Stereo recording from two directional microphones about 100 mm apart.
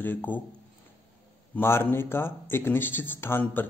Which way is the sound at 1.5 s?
20° left (ahead or behind).